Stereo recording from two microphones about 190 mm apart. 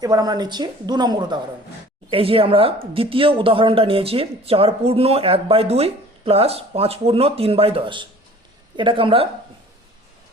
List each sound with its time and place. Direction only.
0.0 s speech: 20° right (ahead or behind)